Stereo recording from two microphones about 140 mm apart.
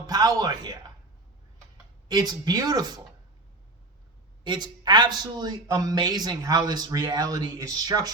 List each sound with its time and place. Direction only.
0.1 s a man's voice: 30° right (ahead or behind)
2.0 s a man's voice: 30° right (ahead or behind)
4.4 s a man's voice: 30° right (ahead or behind)